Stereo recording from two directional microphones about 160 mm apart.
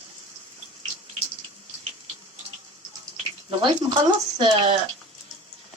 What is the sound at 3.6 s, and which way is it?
Speech, 30° right (ahead or behind).